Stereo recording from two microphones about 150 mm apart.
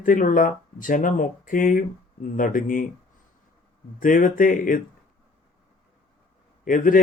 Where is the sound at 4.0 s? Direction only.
60° left (ahead or behind).